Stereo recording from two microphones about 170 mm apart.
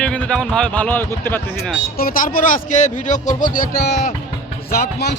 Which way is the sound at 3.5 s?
60° left (ahead or behind).